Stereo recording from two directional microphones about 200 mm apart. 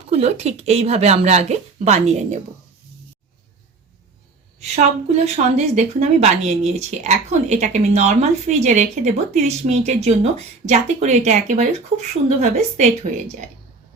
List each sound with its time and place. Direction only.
0.1 s speech: 30° right (ahead or behind)
4.6 s speech: 35° right (ahead or behind)